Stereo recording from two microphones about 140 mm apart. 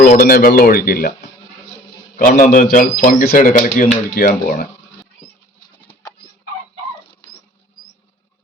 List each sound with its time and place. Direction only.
0.0 s speech: 90° left
3.3 s speech: 70° left (ahead or behind)